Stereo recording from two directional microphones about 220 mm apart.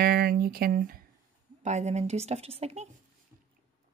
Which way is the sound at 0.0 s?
45° right (ahead or behind).